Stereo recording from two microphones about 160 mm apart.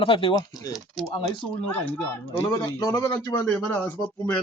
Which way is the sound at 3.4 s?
10° left (ahead or behind).